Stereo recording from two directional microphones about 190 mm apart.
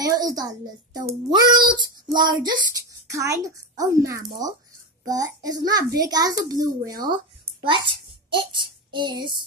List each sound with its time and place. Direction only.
0.0 s a child's voice: 20° right (ahead or behind)
8.3 s child singing: 25° right (ahead or behind)